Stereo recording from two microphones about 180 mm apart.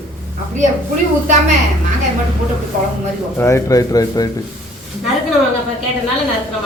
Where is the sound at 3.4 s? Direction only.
15° left (ahead or behind).